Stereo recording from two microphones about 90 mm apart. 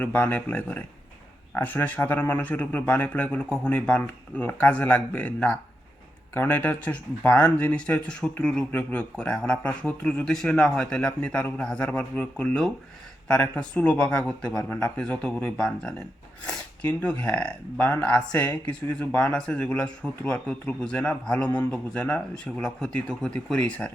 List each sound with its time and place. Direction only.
0.0 s speech: 20° left (ahead or behind)
18.4 s speech: 50° left (ahead or behind)
18.9 s speech: 15° left (ahead or behind)